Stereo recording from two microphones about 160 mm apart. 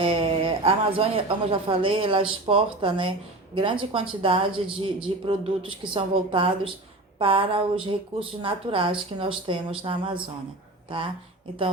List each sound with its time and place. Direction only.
0.0 s a woman's voice: 35° right (ahead or behind)